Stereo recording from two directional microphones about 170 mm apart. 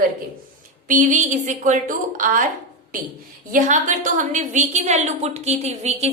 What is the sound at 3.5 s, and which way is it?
A woman's voice, 45° right (ahead or behind).